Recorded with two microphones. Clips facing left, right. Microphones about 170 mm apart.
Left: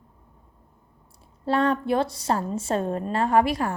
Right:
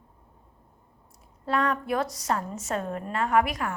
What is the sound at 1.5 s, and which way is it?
A woman's voice, 30° left (ahead or behind).